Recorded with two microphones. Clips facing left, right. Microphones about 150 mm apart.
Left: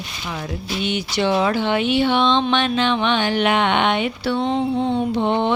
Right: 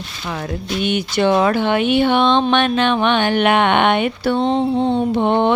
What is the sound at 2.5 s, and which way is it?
Speech, 55° right (ahead or behind).